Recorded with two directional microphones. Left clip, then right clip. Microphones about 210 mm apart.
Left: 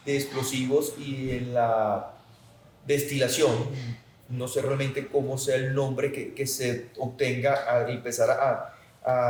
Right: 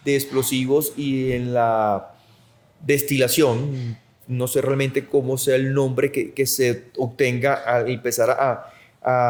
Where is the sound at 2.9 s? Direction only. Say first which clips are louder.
Right 6 dB; 50° right (ahead or behind).